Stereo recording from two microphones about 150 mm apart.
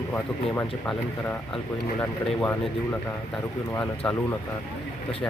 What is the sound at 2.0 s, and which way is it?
Speech, 15° left (ahead or behind).